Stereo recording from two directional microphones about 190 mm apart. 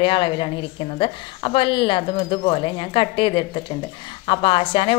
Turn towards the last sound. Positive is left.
turn(degrees=30)  # may be behind; listen again after turning